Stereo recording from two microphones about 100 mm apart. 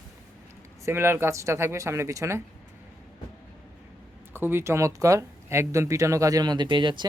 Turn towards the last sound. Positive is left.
turn(degrees=-50)  # may be behind; listen again after turning